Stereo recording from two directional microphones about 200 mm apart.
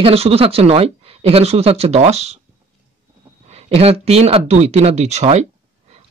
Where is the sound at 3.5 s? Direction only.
30° right (ahead or behind).